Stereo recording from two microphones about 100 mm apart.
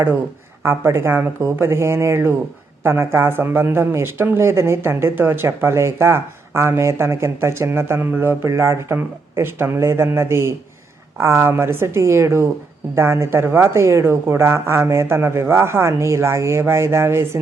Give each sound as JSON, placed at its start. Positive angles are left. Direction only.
{"t": 0.6, "sound": "speech", "side_deg": -25}